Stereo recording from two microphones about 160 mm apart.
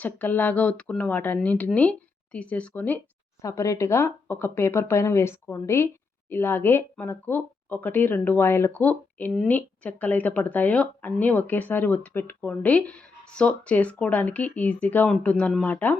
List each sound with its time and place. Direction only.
0.0 s speech: 10° left (ahead or behind)